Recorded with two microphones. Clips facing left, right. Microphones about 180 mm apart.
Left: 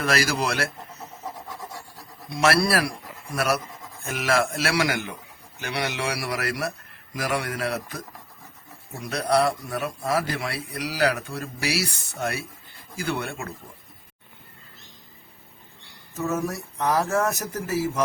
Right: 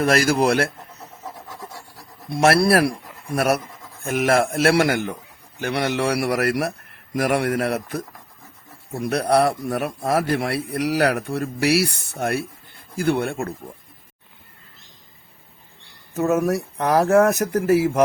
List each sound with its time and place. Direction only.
0.0 s a man's voice: 50° right (ahead or behind)
2.3 s a man's voice: 55° right (ahead or behind)
16.1 s a man's voice: 65° right (ahead or behind)